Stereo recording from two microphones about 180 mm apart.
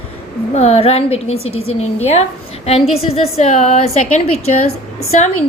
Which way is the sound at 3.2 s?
40° left (ahead or behind).